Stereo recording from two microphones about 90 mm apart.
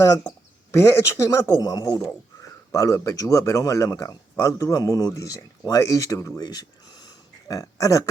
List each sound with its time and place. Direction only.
0.3 s speech: 30° left (ahead or behind)
1.6 s speech: 45° left (ahead or behind)
6.4 s a sound: 50° left (ahead or behind)